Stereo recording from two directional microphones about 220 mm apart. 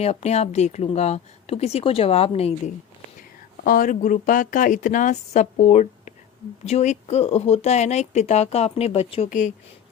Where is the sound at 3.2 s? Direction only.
40° left (ahead or behind).